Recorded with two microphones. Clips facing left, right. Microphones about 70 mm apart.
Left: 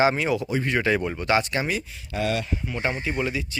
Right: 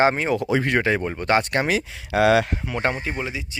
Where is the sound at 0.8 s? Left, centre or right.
Right.